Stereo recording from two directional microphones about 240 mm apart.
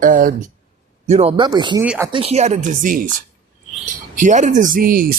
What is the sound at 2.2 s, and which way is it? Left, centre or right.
Speech, right.